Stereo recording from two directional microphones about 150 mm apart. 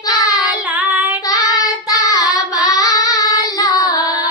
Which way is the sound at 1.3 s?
25° left (ahead or behind).